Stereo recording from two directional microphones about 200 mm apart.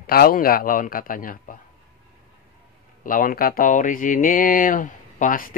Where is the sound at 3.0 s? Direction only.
45° left (ahead or behind).